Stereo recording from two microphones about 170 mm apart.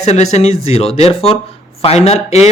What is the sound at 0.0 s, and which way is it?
Speech, 40° left (ahead or behind).